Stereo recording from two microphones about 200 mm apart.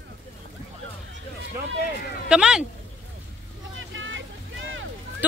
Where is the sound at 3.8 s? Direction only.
70° right (ahead or behind).